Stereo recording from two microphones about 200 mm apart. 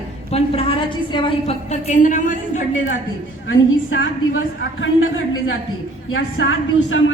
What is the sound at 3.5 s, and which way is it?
A man's voice, 75° left (ahead or behind).